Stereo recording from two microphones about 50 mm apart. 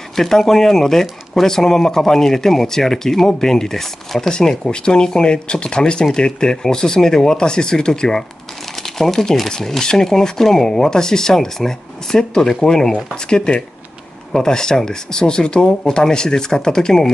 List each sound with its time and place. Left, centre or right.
0.1 s speech: centre